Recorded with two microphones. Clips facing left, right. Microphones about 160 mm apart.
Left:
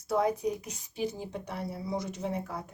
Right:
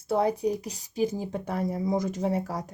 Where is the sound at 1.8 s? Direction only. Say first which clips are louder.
Right 7 dB; 90° right.